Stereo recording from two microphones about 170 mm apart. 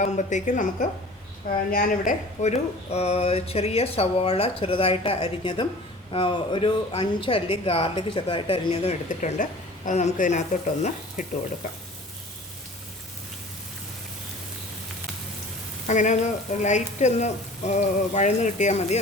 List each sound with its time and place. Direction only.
0.0 s frying: 45° left (ahead or behind)
1.5 s speech: 55° left (ahead or behind)
10.8 s frying: 50° left (ahead or behind)
15.9 s frying: 45° left (ahead or behind)